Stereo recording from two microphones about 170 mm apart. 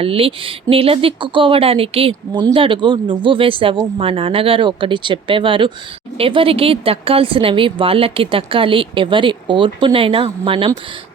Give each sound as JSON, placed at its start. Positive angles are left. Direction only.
{"t": 0.0, "sound": "speech", "side_deg": -35}